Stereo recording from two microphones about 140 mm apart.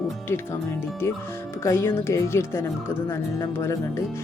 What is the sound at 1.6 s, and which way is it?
Speech, 20° left (ahead or behind).